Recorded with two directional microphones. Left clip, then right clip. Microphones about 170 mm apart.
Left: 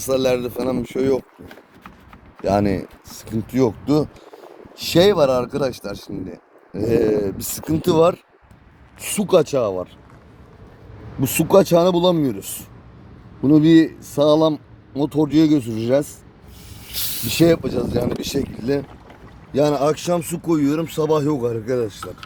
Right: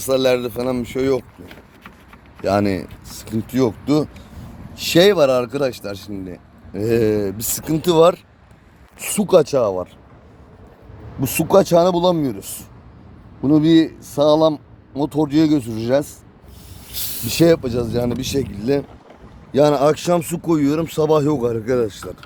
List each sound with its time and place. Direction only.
0.0 s speech: centre (ahead or behind)
2.4 s speech: 10° left (ahead or behind)
4.7 s speech: centre (ahead or behind)
5.8 s speech: 15° right (ahead or behind)
6.7 s speech: 5° left (ahead or behind)
9.0 s speech: 40° right (ahead or behind)
11.2 s speech: 20° right (ahead or behind)
12.0 s speech: 15° left (ahead or behind)
12.4 s speech: 20° right (ahead or behind)
13.4 s a man's voice: 20° left (ahead or behind)
14.3 s a sound: 10° left (ahead or behind)
15.1 s speech: 10° left (ahead or behind)
16.9 s a sound: 30° right (ahead or behind)
17.2 s speech: centre (ahead or behind); by 21.9 s 25° right (ahead or behind)